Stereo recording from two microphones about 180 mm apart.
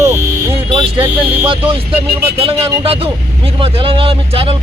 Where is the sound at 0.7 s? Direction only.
30° right (ahead or behind).